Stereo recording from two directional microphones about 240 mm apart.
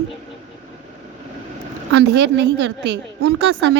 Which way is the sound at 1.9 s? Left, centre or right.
Right.